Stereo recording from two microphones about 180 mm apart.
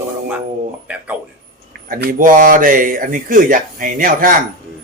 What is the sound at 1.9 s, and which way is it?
Speech, 50° right (ahead or behind).